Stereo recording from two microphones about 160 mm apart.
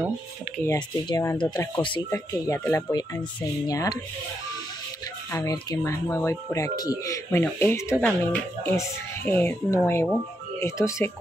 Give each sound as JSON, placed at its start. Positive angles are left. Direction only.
{"t": 0.7, "sound": "speech", "side_deg": 25}
{"t": 2.0, "sound": "speech", "side_deg": 20}
{"t": 5.3, "sound": "speech", "side_deg": 20}